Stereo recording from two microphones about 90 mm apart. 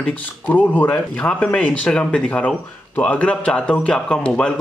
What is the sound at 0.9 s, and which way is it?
Speech, 15° left (ahead or behind).